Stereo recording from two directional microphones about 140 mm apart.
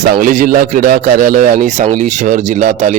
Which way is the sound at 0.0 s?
75° right (ahead or behind).